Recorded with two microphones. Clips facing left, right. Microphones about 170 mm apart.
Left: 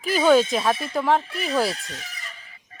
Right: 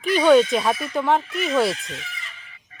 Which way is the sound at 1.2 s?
35° left (ahead or behind).